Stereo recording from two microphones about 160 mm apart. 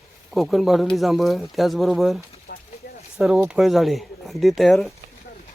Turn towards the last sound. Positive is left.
turn(degrees=0)  # may be behind; listen again after turning